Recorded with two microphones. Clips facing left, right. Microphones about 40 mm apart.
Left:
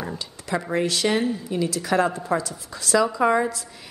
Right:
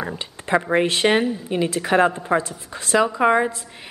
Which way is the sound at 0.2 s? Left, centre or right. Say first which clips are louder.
Right 10 dB; right.